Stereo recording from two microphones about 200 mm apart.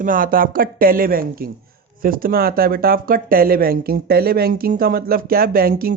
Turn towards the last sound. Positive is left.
turn(degrees=-45)  # may be behind; listen again after turning